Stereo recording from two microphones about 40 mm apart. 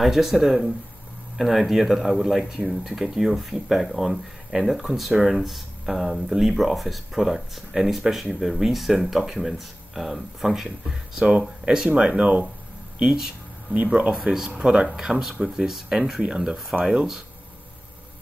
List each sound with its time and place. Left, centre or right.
0.0 s speech: centre
12.0 s speech: right
13.0 s speech: centre
13.8 s speech: right
14.1 s speech: centre
14.6 s speech: right